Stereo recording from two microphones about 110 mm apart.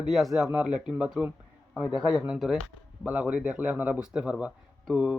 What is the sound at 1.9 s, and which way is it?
Speech, 45° left (ahead or behind).